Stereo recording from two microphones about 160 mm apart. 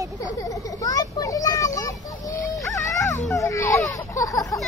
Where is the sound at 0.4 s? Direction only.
20° left (ahead or behind).